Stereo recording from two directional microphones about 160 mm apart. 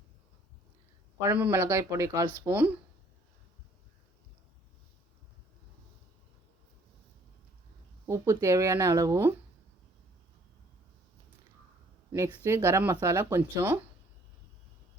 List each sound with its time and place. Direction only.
1.2 s speech: 10° right (ahead or behind)
8.0 s speech: 20° right (ahead or behind)
12.5 s speech: 15° right (ahead or behind)